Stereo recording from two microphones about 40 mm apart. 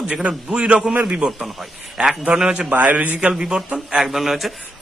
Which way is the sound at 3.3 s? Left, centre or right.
Right.